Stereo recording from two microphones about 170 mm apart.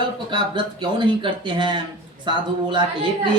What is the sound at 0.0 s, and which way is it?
A man's voice, 30° right (ahead or behind).